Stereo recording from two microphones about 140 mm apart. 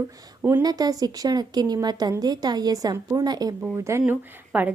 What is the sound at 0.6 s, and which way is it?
A woman's voice, 25° right (ahead or behind).